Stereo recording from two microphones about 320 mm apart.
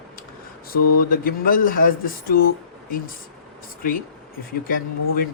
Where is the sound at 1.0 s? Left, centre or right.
Left.